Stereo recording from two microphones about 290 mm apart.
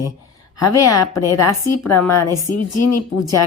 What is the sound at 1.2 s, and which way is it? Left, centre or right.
Speech, left.